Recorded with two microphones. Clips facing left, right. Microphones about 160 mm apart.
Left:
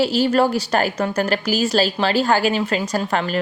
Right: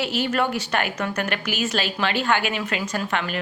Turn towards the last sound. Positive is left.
turn(degrees=35)  # may be behind; listen again after turning